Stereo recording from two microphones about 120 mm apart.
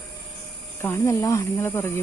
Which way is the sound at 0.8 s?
20° left (ahead or behind).